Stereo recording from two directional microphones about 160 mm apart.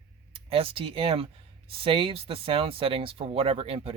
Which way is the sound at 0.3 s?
35° right (ahead or behind).